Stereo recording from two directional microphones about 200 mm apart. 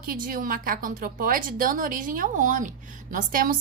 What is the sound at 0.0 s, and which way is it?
A woman's voice, 45° right (ahead or behind).